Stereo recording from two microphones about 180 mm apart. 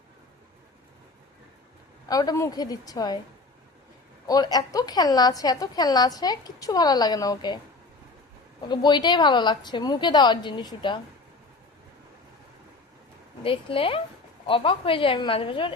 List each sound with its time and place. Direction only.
2.0 s a woman's voice: 20° left (ahead or behind)
4.3 s a woman's voice: 20° left (ahead or behind)
8.7 s a woman's voice: 25° left (ahead or behind)
13.4 s a woman's voice: 30° left (ahead or behind)